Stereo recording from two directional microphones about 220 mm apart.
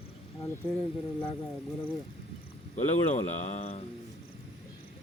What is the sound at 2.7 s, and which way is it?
Speech, 30° left (ahead or behind).